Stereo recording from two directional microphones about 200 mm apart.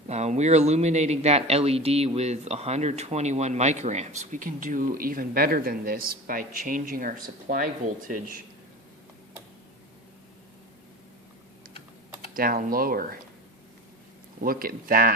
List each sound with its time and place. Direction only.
0.1 s speech: 35° right (ahead or behind)
12.3 s speech: 45° right (ahead or behind)
14.4 s speech: 45° right (ahead or behind)